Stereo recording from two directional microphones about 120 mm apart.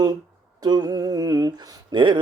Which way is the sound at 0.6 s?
35° right (ahead or behind).